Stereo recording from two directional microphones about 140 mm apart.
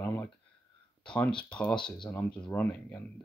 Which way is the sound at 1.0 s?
5° left (ahead or behind).